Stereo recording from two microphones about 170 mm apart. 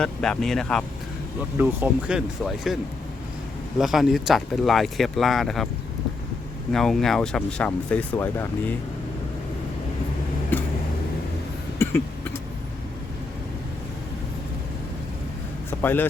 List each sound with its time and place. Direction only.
0.0 s speech: 5° left (ahead or behind)
1.5 s speech: 10° right (ahead or behind)
3.8 s speech: centre (ahead or behind)
6.7 s speech: centre (ahead or behind)
10.5 s a sound: 10° left (ahead or behind)
15.8 s speech: 10° left (ahead or behind)